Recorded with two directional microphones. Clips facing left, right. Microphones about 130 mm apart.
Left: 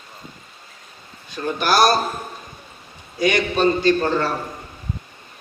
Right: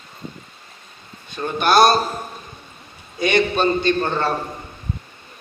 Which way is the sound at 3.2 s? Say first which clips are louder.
Even; 25° right (ahead or behind).